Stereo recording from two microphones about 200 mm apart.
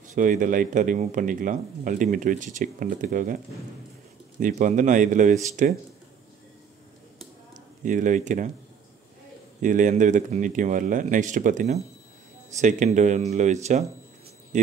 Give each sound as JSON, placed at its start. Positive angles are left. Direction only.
{"t": 0.0, "sound": "speech", "side_deg": -40}
{"t": 4.4, "sound": "speech", "side_deg": -40}
{"t": 7.8, "sound": "speech", "side_deg": -40}
{"t": 9.6, "sound": "speech", "side_deg": -40}